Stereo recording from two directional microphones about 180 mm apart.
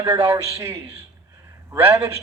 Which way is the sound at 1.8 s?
15° right (ahead or behind).